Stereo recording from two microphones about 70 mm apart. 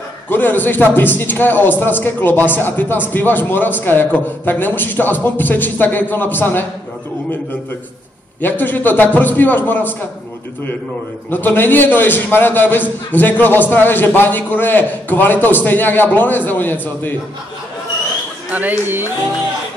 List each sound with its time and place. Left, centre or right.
0.3 s a man's voice: left
8.4 s a man's voice: left
11.2 s a man's voice: left
18.5 s speech: right